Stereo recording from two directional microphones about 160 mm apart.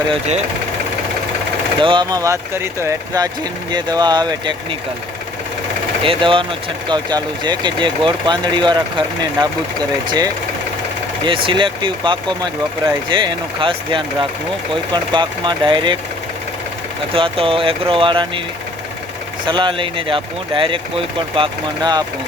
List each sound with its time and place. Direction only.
0.1 s speech: 45° right (ahead or behind)
1.8 s speech: 30° right (ahead or behind)
3.7 s speech: 25° right (ahead or behind)
6.0 s speech: 35° right (ahead or behind)
11.4 s speech: 30° right (ahead or behind)
17.2 s speech: 35° right (ahead or behind)
19.5 s speech: 30° right (ahead or behind)